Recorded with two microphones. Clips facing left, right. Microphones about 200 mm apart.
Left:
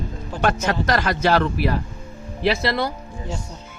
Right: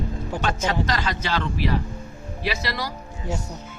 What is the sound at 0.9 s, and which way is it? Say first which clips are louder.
Speech: left 7 dB; 50° left (ahead or behind).